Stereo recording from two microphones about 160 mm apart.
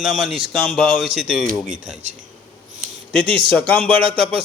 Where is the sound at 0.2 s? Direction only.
Centre (ahead or behind).